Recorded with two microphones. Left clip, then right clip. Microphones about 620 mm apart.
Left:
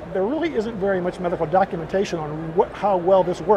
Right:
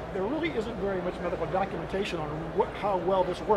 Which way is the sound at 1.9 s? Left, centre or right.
Left.